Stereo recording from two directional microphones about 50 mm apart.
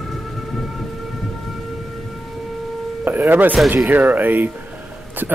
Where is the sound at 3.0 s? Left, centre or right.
Right.